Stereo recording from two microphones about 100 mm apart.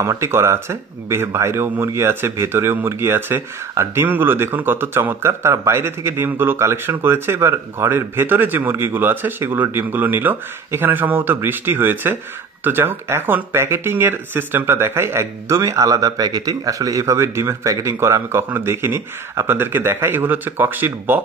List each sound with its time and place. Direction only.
0.0 s speech: 30° right (ahead or behind)